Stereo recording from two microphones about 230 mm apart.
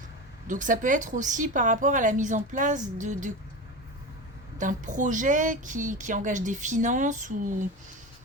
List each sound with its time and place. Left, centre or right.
0.4 s speech: right
4.5 s speech: right